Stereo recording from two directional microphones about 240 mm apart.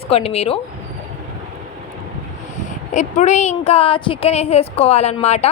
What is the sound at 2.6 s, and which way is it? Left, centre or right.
A woman's voice, left.